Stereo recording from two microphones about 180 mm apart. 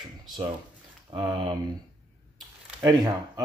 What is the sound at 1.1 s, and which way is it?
Speech, 25° right (ahead or behind).